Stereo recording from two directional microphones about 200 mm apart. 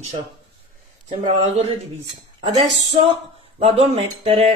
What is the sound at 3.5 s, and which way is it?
Speech, 30° right (ahead or behind).